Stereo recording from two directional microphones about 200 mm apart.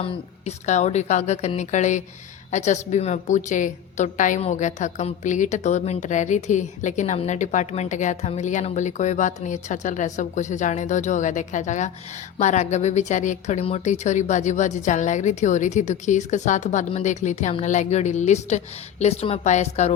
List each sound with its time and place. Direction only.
0.0 s a woman's voice: 30° left (ahead or behind)